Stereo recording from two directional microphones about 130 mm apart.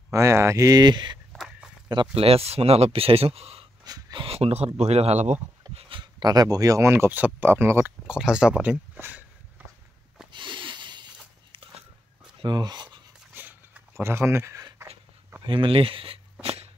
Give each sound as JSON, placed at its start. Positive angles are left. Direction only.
{"t": 0.1, "sound": "speech", "side_deg": -20}
{"t": 1.3, "sound": "walk", "side_deg": 0}
{"t": 2.1, "sound": "speech", "side_deg": -50}
{"t": 3.8, "sound": "a sound", "side_deg": -35}
{"t": 4.3, "sound": "speech", "side_deg": -50}
{"t": 5.8, "sound": "speech", "side_deg": -40}
{"t": 8.1, "sound": "speech", "side_deg": -5}
{"t": 10.3, "sound": "a sound", "side_deg": -40}
{"t": 12.4, "sound": "speech", "side_deg": -35}
{"t": 13.3, "sound": "writing", "side_deg": -15}
{"t": 15.4, "sound": "a sound", "side_deg": -40}